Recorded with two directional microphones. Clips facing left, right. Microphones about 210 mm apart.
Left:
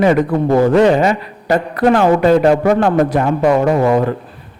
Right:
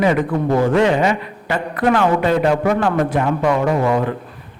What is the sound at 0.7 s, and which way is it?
A man's voice, 40° left (ahead or behind).